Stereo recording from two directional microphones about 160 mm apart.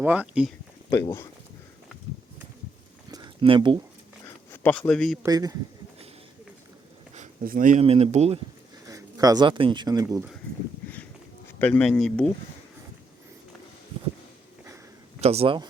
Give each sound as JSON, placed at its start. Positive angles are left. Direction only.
{"t": 0.0, "sound": "speech", "side_deg": -10}
{"t": 0.9, "sound": "speech", "side_deg": 20}
{"t": 3.1, "sound": "a sound", "side_deg": -30}
{"t": 4.5, "sound": "a man's voice", "side_deg": 10}
{"t": 5.2, "sound": "speech", "side_deg": -20}
{"t": 7.2, "sound": "a sound", "side_deg": -60}
{"t": 7.8, "sound": "speech", "side_deg": -40}
{"t": 8.9, "sound": "speech", "side_deg": -20}
{"t": 11.6, "sound": "a man's voice", "side_deg": 10}
{"t": 15.2, "sound": "speech", "side_deg": -40}